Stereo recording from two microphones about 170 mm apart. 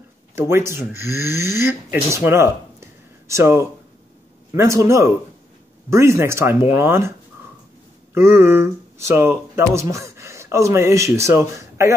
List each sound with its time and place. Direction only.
0.4 s speech: 15° right (ahead or behind)
2.2 s a sound: 15° right (ahead or behind)
4.5 s speech: 15° right (ahead or behind)